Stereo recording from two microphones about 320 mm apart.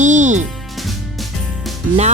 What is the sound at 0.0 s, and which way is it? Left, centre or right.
Music, right.